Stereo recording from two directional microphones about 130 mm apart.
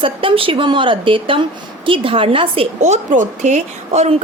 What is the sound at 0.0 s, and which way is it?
A woman's voice, 45° right (ahead or behind).